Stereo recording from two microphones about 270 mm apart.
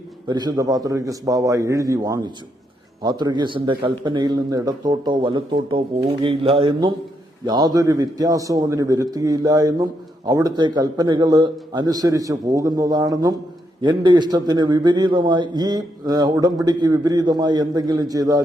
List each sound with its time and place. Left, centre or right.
0.3 s a man's voice: centre